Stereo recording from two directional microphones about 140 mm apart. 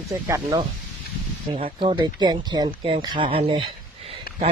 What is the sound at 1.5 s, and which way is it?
Speech, 40° right (ahead or behind).